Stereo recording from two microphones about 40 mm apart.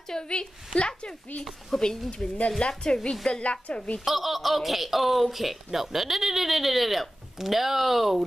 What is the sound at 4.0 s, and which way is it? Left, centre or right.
Speech, centre.